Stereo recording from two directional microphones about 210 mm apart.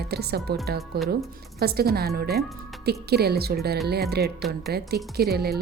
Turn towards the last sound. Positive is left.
turn(degrees=-50)  # may be behind; listen again after turning